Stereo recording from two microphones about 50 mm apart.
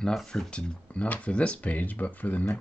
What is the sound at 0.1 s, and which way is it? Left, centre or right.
Speech, centre.